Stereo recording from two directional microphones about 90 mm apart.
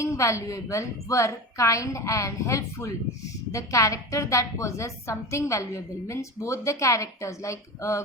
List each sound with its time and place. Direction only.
0.0 s a woman's voice: 35° left (ahead or behind)